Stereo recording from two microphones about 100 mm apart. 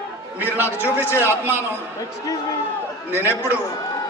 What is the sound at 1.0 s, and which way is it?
Speech, 25° left (ahead or behind).